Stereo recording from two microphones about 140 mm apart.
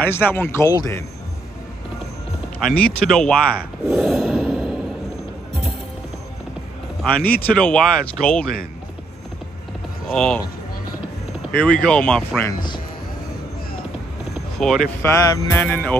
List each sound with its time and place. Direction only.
0.3 s music: 15° left (ahead or behind)
0.7 s speech: 25° left (ahead or behind)
2.6 s speech: 5° left (ahead or behind)
7.0 s speech: 5° left (ahead or behind)
10.1 s speech: 5° left (ahead or behind)
11.5 s music: 10° left (ahead or behind)
14.6 s speech: 5° left (ahead or behind)
15.0 s music: 15° left (ahead or behind)